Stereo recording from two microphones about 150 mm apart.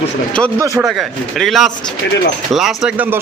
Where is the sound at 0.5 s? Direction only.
20° right (ahead or behind).